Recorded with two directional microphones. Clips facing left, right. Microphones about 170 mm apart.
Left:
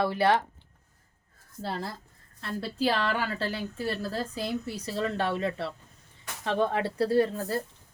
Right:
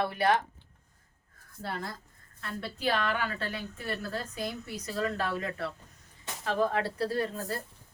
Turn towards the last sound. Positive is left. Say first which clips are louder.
# left 7 dB
turn(degrees=30)  # may be behind; listen again after turning